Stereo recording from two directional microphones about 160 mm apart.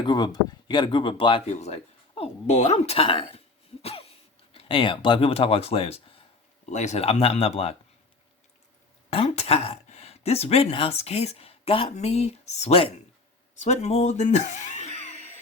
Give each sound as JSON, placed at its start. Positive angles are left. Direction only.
{"t": 0.0, "sound": "speech", "side_deg": 25}
{"t": 1.5, "sound": "speech", "side_deg": 45}
{"t": 6.7, "sound": "speech", "side_deg": 45}
{"t": 9.0, "sound": "speech", "side_deg": 40}